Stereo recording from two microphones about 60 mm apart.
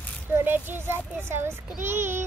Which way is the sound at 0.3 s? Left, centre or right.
Right.